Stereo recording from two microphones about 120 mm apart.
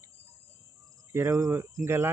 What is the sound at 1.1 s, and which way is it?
Speech, 25° right (ahead or behind).